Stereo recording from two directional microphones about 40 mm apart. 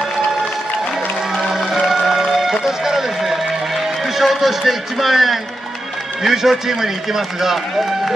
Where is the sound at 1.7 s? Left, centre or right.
Centre.